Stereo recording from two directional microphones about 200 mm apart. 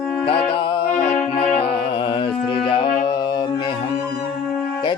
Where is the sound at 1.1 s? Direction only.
5° left (ahead or behind).